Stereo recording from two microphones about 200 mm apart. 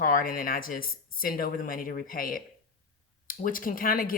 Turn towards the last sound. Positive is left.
turn(degrees=45)  # may be behind; listen again after turning